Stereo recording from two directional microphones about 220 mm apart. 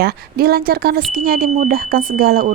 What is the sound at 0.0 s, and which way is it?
A woman's voice, 45° right (ahead or behind).